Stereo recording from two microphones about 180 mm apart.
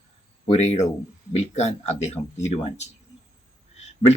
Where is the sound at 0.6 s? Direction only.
40° left (ahead or behind).